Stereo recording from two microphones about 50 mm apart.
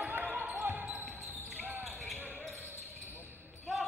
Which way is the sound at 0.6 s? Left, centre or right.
Right.